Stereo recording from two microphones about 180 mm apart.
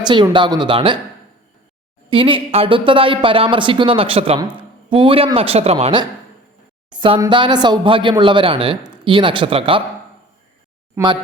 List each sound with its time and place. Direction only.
0.0 s a man's voice: 25° right (ahead or behind)
2.0 s a man's voice: 30° right (ahead or behind)
7.2 s a man's voice: 25° right (ahead or behind)
10.9 s speech: 25° right (ahead or behind)